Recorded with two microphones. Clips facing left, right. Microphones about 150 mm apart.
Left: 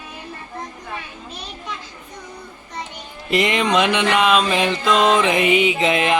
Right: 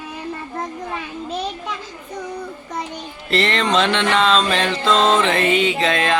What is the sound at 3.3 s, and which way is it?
Music, 15° left (ahead or behind).